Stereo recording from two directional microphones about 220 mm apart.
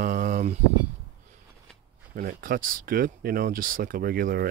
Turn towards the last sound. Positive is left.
turn(degrees=-40)  # may be behind; listen again after turning